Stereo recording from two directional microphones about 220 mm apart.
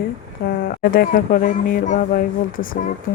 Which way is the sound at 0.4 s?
45° left (ahead or behind).